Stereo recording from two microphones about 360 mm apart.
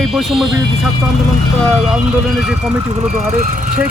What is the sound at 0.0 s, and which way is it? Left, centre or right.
Vehicle, centre.